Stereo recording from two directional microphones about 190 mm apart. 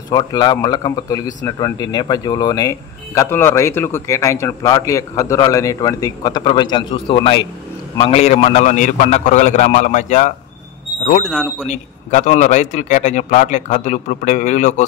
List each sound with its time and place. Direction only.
0.1 s a man's voice: 20° left (ahead or behind); by 10.3 s 40° left (ahead or behind)
11.6 s a man's voice: 40° left (ahead or behind)